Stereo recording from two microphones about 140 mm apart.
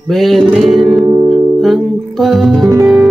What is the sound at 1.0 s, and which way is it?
Music, 35° right (ahead or behind).